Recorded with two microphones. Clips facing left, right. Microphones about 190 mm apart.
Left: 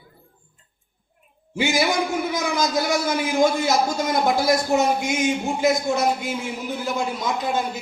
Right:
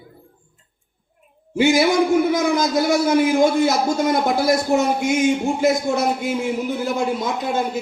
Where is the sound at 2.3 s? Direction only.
55° right (ahead or behind).